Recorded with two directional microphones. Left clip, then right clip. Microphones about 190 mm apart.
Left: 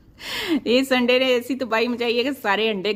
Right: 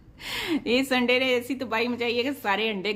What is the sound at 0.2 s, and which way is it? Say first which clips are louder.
Speech: left 4 dB; 35° left (ahead or behind).